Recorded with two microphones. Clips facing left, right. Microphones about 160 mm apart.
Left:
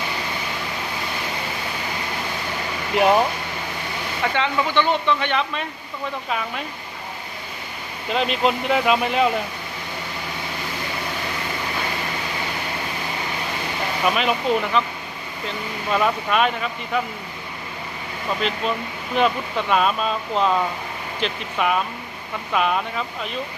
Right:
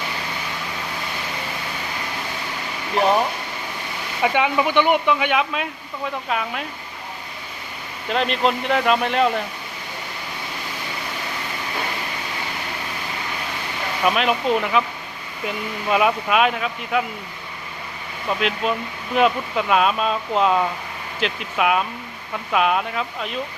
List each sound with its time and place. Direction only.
4.2 s speech: 15° right (ahead or behind)
8.1 s speech: centre (ahead or behind)
14.0 s speech: centre (ahead or behind)
18.3 s speech: 5° right (ahead or behind)